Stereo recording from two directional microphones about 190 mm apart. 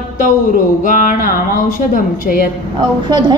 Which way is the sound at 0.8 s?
45° left (ahead or behind).